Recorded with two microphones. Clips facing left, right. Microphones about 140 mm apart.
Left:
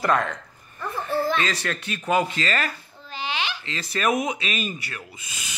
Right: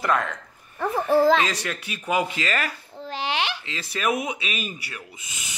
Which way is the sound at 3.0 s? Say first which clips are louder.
Right 4 dB; 70° right (ahead or behind).